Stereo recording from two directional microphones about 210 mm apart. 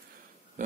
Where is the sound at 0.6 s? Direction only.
35° right (ahead or behind).